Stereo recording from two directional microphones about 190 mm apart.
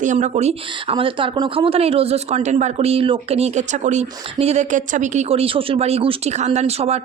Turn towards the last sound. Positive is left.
turn(degrees=-35)  # may be behind; listen again after turning